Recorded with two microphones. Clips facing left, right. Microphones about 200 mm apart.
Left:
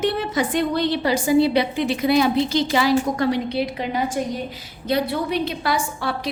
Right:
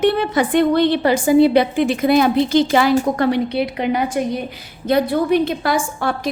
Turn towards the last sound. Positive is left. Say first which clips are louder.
# right 4 dB
turn(degrees=-50)  # may be behind; listen again after turning